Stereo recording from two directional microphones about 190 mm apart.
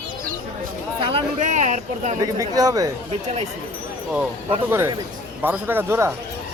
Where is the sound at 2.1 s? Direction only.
20° right (ahead or behind).